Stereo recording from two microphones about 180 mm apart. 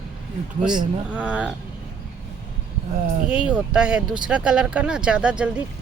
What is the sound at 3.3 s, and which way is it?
Speech, 5° right (ahead or behind).